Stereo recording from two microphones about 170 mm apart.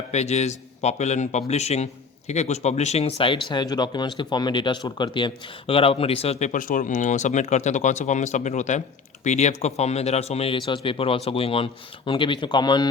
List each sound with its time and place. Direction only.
0.1 s a man's voice: 40° left (ahead or behind)